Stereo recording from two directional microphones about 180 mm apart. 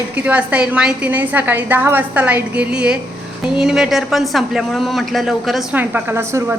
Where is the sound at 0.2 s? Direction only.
5° right (ahead or behind).